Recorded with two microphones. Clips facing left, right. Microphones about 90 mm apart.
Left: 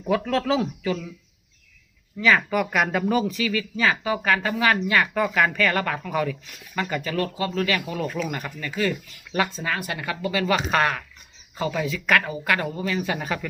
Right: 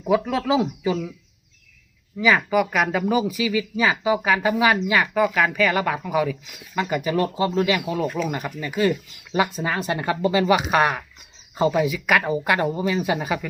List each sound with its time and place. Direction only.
0.1 s speech: 5° right (ahead or behind)
2.1 s speech: 5° right (ahead or behind)
7.9 s speech: 5° right (ahead or behind); by 10.4 s 30° right (ahead or behind)
10.4 s speech: 15° right (ahead or behind)
11.9 s speech: 10° right (ahead or behind)
12.2 s speech: 25° right (ahead or behind); by 13.5 s 10° right (ahead or behind)